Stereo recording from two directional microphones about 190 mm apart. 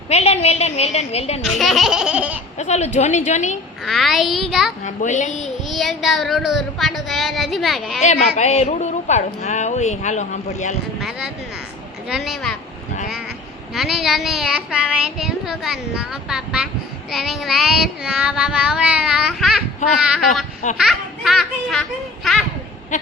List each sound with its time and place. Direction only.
0.1 s a woman's voice: 35° left (ahead or behind)
1.5 s child singing: centre (ahead or behind)
2.6 s a woman's voice: 35° left (ahead or behind)
3.8 s child singing: centre (ahead or behind)
4.9 s a woman's voice: 40° left (ahead or behind)
5.3 s child singing: centre (ahead or behind)
8.0 s a woman's voice: 35° left (ahead or behind)
12.0 s child singing: centre (ahead or behind)
13.7 s child singing: centre (ahead or behind)
22.9 s a woman's voice: 40° left (ahead or behind)